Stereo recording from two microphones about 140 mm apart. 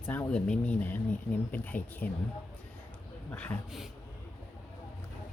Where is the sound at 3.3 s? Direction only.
10° left (ahead or behind).